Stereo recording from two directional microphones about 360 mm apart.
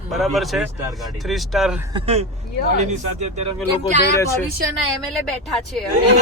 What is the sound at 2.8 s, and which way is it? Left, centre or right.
Speech, centre.